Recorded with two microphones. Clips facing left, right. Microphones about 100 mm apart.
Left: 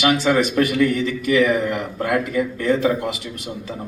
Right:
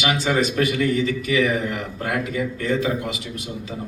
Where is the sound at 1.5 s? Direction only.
45° left (ahead or behind).